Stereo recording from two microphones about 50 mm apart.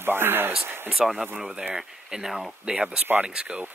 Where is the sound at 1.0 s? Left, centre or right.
Centre.